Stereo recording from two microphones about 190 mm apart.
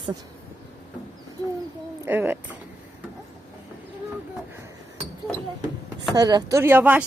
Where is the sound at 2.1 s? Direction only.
10° right (ahead or behind).